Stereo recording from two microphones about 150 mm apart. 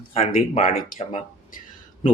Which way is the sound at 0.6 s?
70° left (ahead or behind).